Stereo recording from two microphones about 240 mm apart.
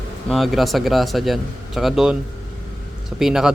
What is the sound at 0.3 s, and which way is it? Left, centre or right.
A man's voice, centre.